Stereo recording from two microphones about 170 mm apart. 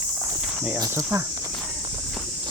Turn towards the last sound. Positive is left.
turn(degrees=-15)  # may be behind; listen again after turning